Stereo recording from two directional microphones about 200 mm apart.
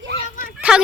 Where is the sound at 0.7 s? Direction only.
5° right (ahead or behind).